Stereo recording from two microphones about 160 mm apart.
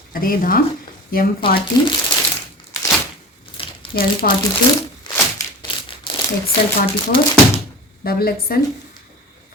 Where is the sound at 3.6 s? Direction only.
30° left (ahead or behind).